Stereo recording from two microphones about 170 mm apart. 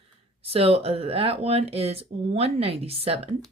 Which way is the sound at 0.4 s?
35° right (ahead or behind).